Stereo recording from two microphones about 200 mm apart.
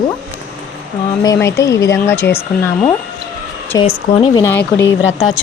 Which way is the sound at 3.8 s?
25° left (ahead or behind).